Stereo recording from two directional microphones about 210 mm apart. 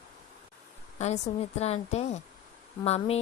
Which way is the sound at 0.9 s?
30° left (ahead or behind).